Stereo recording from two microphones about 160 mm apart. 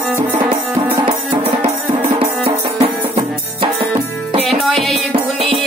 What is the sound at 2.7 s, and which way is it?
Music, 35° right (ahead or behind).